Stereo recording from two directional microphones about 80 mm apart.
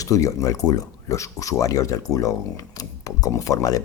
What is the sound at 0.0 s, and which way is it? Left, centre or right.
Speech, left.